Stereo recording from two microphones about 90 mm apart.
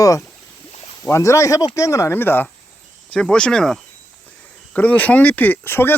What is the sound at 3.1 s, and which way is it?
Speech, 10° left (ahead or behind).